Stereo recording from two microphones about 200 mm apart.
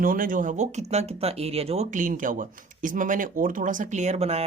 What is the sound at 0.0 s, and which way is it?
A woman's voice, 45° right (ahead or behind).